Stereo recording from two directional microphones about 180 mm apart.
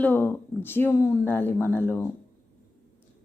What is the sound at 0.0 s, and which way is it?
Speech, 10° left (ahead or behind).